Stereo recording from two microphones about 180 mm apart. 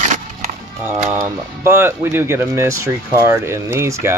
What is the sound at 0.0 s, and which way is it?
Music, 40° right (ahead or behind).